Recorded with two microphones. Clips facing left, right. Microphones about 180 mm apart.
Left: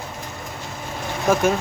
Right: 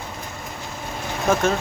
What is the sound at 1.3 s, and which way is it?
Speech, 10° left (ahead or behind).